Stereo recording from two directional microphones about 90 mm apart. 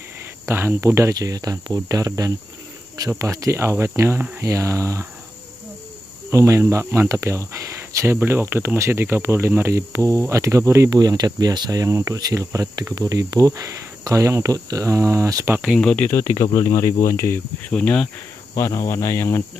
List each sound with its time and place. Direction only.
0.5 s speech: 30° right (ahead or behind)
1.1 s speech: 45° right (ahead or behind)
6.3 s speech: 35° right (ahead or behind)
15.8 s speech: 10° left (ahead or behind)
16.3 s speech: 35° left (ahead or behind)
17.6 s speech: 15° left (ahead or behind)
18.5 s speech: 45° left (ahead or behind)
18.9 s speech: 30° left (ahead or behind)